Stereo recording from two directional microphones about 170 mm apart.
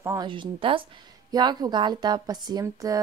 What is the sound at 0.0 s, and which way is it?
Speech, 15° right (ahead or behind).